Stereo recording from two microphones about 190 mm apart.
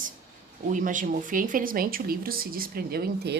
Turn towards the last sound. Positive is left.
turn(degrees=-55)  # may be behind; listen again after turning